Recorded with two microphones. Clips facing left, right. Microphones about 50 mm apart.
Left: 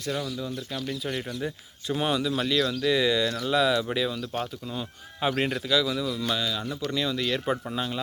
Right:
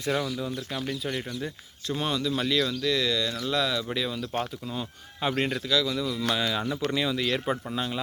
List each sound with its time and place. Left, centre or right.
0.0 s speech: right
0.3 s speech: centre
0.9 s speech: centre
2.8 s speech: centre
6.4 s speech: right
6.9 s speech: centre